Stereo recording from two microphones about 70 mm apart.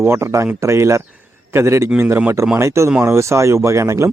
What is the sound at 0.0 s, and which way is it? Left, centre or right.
Speech, right.